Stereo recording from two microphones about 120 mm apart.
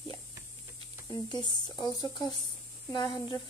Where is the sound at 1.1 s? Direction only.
35° left (ahead or behind).